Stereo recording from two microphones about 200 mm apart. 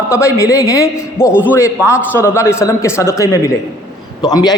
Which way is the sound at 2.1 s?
15° left (ahead or behind).